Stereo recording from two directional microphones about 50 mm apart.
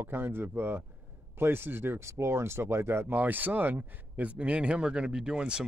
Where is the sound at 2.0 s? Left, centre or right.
Right.